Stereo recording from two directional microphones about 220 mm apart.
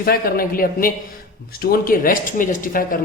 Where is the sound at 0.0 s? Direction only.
45° left (ahead or behind).